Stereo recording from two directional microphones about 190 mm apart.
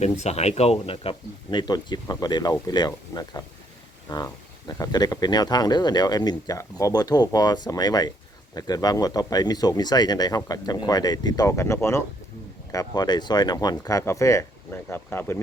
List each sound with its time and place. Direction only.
0.0 s speech: 35° left (ahead or behind); by 15.4 s 10° left (ahead or behind)